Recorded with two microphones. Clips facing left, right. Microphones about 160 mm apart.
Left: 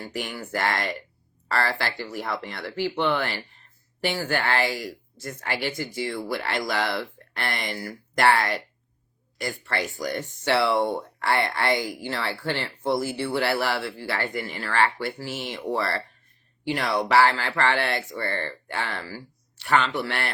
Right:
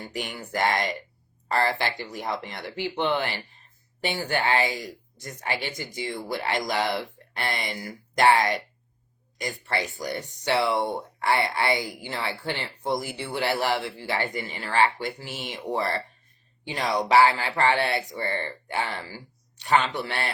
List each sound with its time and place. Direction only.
0.0 s speech: 20° right (ahead or behind)